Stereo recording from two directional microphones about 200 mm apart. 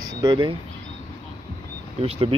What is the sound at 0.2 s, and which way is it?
Speech, 25° right (ahead or behind).